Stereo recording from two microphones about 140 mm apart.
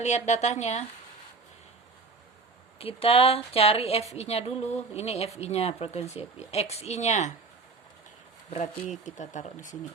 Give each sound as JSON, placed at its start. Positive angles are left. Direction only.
{"t": 0.0, "sound": "speech", "side_deg": 55}
{"t": 2.7, "sound": "speech", "side_deg": 45}
{"t": 8.4, "sound": "speech", "side_deg": 50}
{"t": 9.0, "sound": "speech", "side_deg": 60}